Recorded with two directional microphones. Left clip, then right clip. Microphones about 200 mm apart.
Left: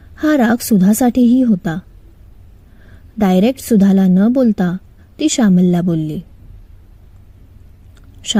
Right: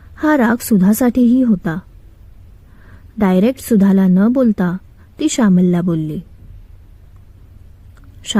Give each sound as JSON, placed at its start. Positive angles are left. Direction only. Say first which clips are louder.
{"t": 0.2, "sound": "a woman's voice", "louder": "even", "side_deg": 20}
{"t": 2.8, "sound": "a sound", "louder": "even", "side_deg": 20}
{"t": 3.6, "sound": "a woman's voice", "louder": "left 1 dB", "side_deg": 15}